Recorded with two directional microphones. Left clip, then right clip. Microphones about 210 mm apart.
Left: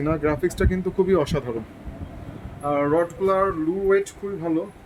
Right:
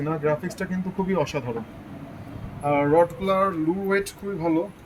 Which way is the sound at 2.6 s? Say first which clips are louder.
Right 2 dB; 20° left (ahead or behind).